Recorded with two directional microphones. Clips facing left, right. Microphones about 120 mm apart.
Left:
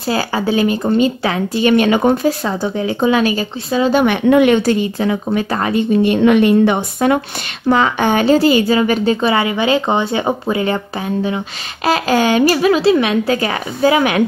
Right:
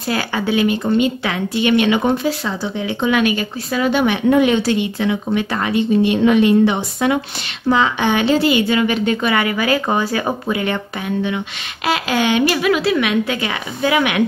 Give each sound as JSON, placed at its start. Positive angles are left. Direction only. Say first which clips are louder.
{"t": 0.0, "sound": "a woman's voice", "louder": "left 3 dB", "side_deg": 30}
{"t": 3.9, "sound": "speech", "louder": "left 3 dB", "side_deg": 55}
{"t": 4.3, "sound": "speech", "louder": "left 3 dB", "side_deg": 65}
{"t": 4.6, "sound": "a woman's voice", "louder": "left 3 dB", "side_deg": 45}
{"t": 6.2, "sound": "a woman's voice", "louder": "left 2 dB", "side_deg": 55}